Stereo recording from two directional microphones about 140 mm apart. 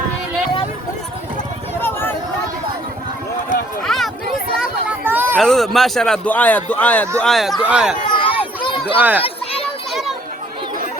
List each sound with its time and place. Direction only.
1.8 s a sound: 15° left (ahead or behind)
3.8 s chatter: centre (ahead or behind); by 5.4 s 15° right (ahead or behind)
5.4 s a man's voice: centre (ahead or behind)
8.1 s run: 35° left (ahead or behind)
9.0 s speech: 10° right (ahead or behind)
9.2 s a sound: 45° left (ahead or behind)